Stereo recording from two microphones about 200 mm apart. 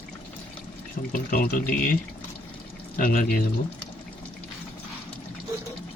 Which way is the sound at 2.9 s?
45° left (ahead or behind).